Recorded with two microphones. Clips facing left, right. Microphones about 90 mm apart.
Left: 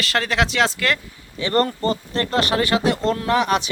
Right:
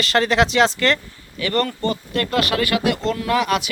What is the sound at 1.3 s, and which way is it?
Speech, 30° left (ahead or behind).